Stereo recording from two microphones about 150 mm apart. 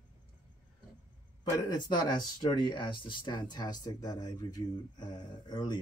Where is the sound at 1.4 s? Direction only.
25° left (ahead or behind).